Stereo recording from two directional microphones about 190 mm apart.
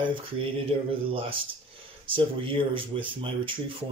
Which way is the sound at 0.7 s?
30° right (ahead or behind).